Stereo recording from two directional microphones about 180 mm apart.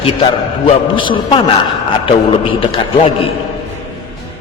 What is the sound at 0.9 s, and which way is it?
A man's voice, 30° left (ahead or behind).